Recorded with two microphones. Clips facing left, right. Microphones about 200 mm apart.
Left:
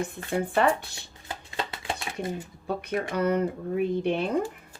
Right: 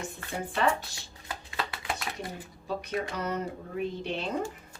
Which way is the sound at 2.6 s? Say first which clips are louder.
Left 3 dB; 55° left (ahead or behind).